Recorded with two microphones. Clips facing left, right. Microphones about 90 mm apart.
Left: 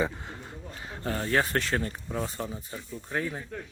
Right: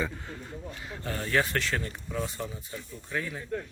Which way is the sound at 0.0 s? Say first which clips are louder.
Left 3 dB; 20° left (ahead or behind).